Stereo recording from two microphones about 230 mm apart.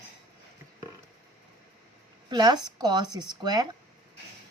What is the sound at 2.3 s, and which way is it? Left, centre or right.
A woman's voice, centre.